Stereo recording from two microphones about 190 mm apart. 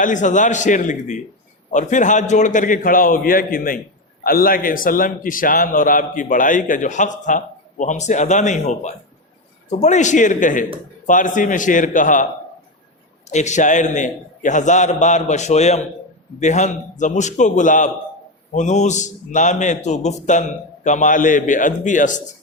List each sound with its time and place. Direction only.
0.0 s a man's voice: 40° left (ahead or behind)
13.3 s a man's voice: 40° left (ahead or behind)